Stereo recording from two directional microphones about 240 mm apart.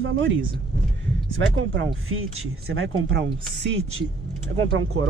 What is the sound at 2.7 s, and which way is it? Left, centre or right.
Speech, right.